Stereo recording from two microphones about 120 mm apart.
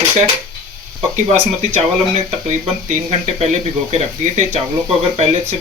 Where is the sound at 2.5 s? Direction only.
80° right; by 5.6 s 60° right (ahead or behind).